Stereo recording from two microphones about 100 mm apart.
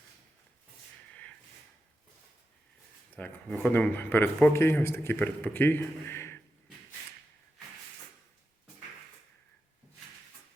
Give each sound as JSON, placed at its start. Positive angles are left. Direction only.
{"t": 3.1, "sound": "a man's voice", "side_deg": 15}